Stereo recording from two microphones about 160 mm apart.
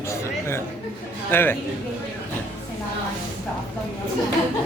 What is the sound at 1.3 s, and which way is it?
Speech, 15° left (ahead or behind).